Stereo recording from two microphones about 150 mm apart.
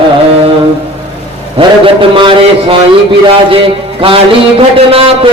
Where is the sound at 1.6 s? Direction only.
30° right (ahead or behind).